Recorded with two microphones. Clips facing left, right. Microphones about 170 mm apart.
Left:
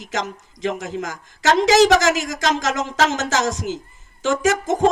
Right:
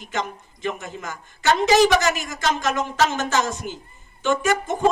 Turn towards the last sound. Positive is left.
turn(degrees=90)